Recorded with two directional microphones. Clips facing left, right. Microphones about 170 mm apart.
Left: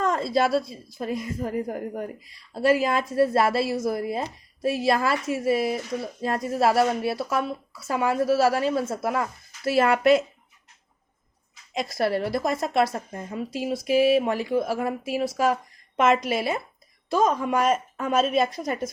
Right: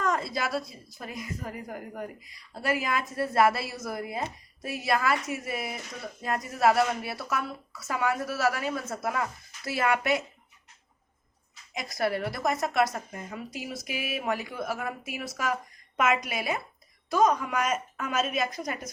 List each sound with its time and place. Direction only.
0.0 s speech: 25° left (ahead or behind)
11.9 s speech: 30° left (ahead or behind)